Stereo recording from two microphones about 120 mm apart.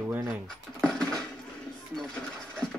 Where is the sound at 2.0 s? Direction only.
5° left (ahead or behind).